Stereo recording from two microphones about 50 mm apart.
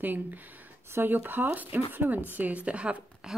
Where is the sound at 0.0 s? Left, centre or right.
Right.